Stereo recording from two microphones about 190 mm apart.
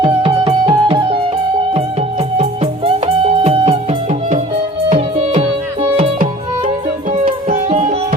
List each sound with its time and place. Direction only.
0.0 s music: 25° right (ahead or behind)
4.9 s music: 35° right (ahead or behind)
7.4 s music: 35° right (ahead or behind)